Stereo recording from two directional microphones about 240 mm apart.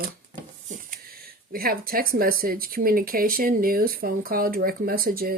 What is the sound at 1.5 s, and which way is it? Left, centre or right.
Speech, right.